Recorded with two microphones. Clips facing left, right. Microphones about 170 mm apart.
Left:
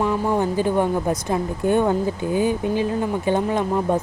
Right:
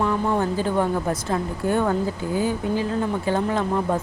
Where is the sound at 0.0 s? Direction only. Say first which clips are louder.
Left 1 dB; 15° left (ahead or behind).